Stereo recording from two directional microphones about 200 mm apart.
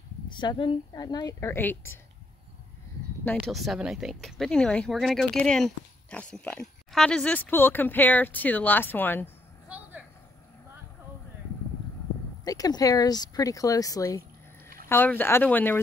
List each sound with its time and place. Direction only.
0.3 s a woman's voice: 25° left (ahead or behind)
3.3 s speech: 5° left (ahead or behind)
9.7 s a sound: 5° right (ahead or behind)
12.4 s speech: 20° left (ahead or behind)